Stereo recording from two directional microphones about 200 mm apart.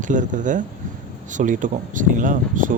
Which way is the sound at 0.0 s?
40° right (ahead or behind).